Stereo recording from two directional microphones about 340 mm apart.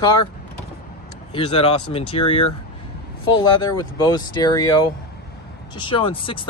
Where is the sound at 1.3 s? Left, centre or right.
Centre.